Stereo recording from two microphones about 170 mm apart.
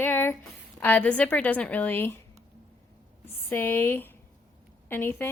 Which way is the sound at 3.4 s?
10° left (ahead or behind).